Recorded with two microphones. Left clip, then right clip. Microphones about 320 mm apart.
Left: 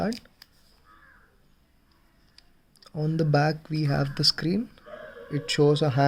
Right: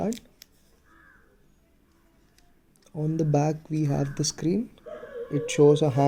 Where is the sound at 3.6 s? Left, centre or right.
Left.